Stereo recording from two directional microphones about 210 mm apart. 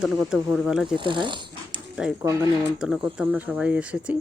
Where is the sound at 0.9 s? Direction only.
20° right (ahead or behind).